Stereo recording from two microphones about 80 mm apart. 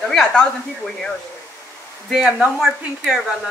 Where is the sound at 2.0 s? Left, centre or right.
Centre.